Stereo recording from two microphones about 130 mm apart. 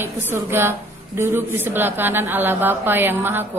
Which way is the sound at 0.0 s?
15° right (ahead or behind).